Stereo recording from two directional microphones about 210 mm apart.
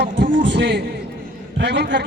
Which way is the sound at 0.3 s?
55° right (ahead or behind).